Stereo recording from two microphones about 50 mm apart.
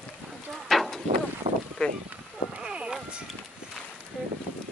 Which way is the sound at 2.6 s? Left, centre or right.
Centre.